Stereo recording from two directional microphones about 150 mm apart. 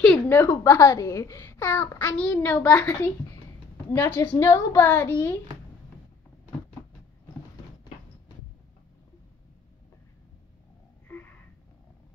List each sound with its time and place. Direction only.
0.0 s a sound: 5° left (ahead or behind)
0.4 s a child's voice: 20° left (ahead or behind)
11.1 s wheeze: 10° left (ahead or behind)